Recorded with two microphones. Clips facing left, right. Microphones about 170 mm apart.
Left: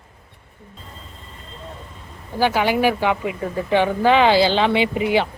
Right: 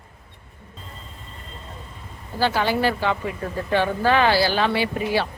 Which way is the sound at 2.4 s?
15° left (ahead or behind).